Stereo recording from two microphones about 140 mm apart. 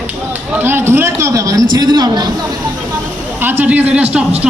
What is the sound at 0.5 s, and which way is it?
A man's voice, 15° right (ahead or behind).